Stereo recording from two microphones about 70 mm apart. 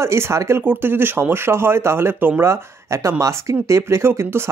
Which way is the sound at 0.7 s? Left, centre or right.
Right.